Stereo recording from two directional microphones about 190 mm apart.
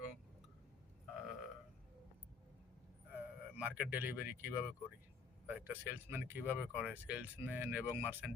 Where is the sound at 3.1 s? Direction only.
10° right (ahead or behind).